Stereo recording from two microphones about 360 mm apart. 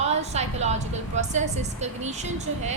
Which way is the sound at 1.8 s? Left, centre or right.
Centre.